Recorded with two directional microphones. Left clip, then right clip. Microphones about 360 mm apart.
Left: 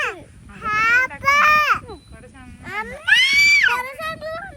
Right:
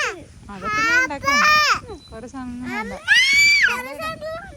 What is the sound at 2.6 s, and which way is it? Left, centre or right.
Cat, centre.